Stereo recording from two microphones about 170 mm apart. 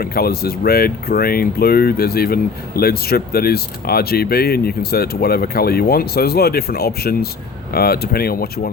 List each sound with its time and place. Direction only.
0.0 s speech: 65° left (ahead or behind)